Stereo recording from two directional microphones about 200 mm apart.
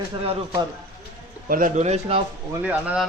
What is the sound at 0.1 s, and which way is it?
Speech, 30° right (ahead or behind).